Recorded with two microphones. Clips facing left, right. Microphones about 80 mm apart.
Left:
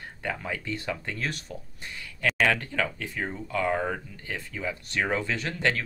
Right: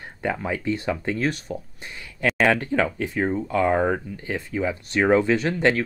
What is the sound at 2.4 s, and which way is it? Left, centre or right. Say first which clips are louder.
Speech: right 6 dB; right.